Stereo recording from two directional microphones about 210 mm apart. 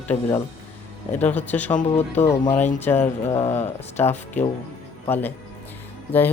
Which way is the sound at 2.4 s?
10° left (ahead or behind).